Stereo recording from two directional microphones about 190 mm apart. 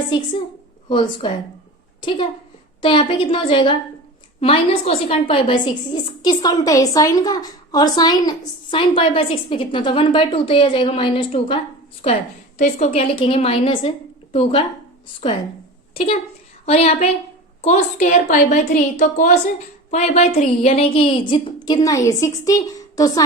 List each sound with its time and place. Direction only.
0.9 s a woman's voice: 25° left (ahead or behind)
16.6 s a woman's voice: 35° left (ahead or behind)